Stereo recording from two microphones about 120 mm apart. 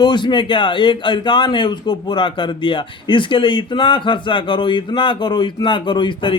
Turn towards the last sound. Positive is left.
turn(degrees=45)  # may be behind; listen again after turning